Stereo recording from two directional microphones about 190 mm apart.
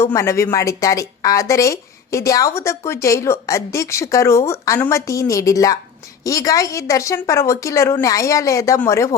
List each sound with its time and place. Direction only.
0.0 s a woman's voice: 15° left (ahead or behind)